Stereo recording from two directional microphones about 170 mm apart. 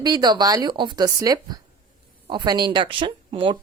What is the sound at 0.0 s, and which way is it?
A woman's voice, 25° right (ahead or behind).